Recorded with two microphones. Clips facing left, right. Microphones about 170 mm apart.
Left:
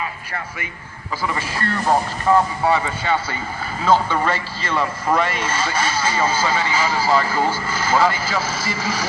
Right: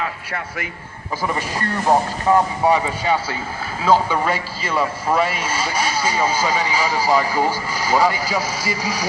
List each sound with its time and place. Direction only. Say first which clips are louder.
0.0 s a man's voice: right 2 dB; 70° right (ahead or behind)
1.4 s speech: right 1 dB; 15° right (ahead or behind)